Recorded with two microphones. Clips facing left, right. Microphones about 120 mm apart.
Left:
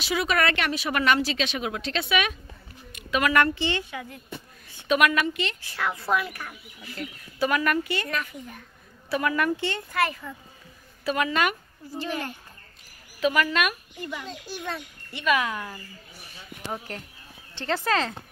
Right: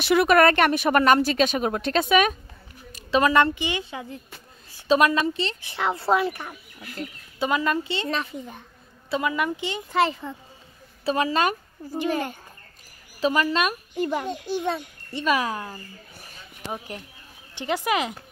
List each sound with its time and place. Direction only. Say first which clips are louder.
0.0 s speech: right 8 dB; 60° right (ahead or behind); by 2.3 s 40° right (ahead or behind)
2.9 s a sound: right 4 dB; 35° right (ahead or behind)
3.5 s speech: left 1 dB; 15° right (ahead or behind)
3.9 s a child's voice: right 1 dB; 25° right (ahead or behind)
13.2 s a woman's voice: right 1 dB; 30° right (ahead or behind)
13.9 s speech: right 10 dB; 45° right (ahead or behind)
14.2 s a child's voice: right 8 dB; 20° right (ahead or behind)
15.1 s a woman's voice: right 1 dB; 35° right (ahead or behind)
16.7 s speech: right 1 dB; 15° right (ahead or behind)